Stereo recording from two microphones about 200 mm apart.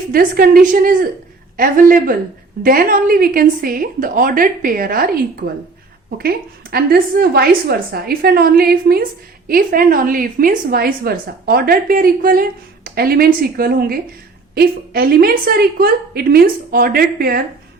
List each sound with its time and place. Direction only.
0.1 s a woman's voice: 45° right (ahead or behind)